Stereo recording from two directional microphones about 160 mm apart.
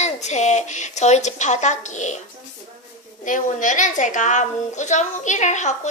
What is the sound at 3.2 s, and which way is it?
A woman's voice, 55° left (ahead or behind).